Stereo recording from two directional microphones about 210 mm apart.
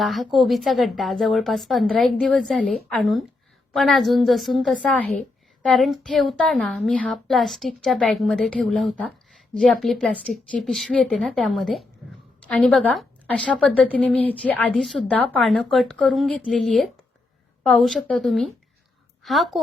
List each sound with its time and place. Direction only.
0.0 s a woman's voice: centre (ahead or behind)